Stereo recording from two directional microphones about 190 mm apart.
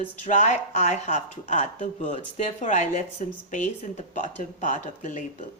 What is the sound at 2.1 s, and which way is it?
A woman's voice, 35° left (ahead or behind).